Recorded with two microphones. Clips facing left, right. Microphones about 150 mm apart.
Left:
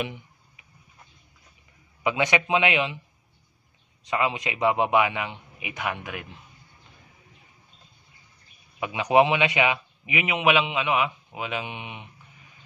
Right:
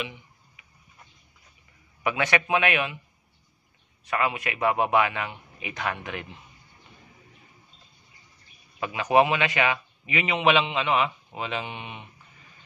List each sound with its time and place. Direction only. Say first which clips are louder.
2.0 s a man's voice: left 1 dB; 15° left (ahead or behind)
4.0 s a man's voice: left 1 dB; 20° left (ahead or behind)
8.7 s a man's voice: left 1 dB; 15° left (ahead or behind)